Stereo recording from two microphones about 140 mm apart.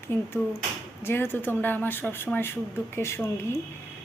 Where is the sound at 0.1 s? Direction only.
15° left (ahead or behind).